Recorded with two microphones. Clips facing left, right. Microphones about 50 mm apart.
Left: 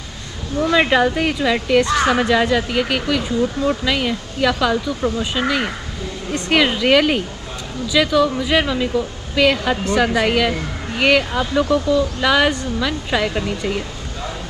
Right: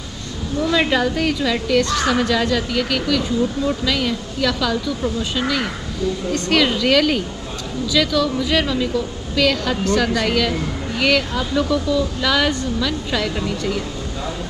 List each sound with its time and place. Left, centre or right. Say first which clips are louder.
0.6 s a woman's voice: left 3 dB; centre